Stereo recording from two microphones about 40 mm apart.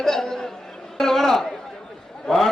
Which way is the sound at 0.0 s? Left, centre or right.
Centre.